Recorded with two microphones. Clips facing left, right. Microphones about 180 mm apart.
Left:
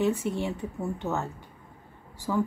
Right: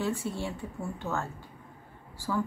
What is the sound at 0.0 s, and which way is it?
Speech, 20° left (ahead or behind).